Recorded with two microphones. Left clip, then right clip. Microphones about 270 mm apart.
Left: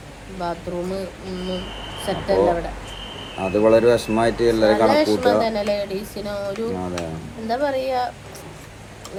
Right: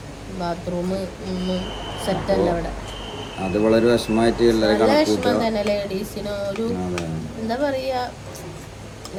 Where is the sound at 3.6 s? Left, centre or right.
Left.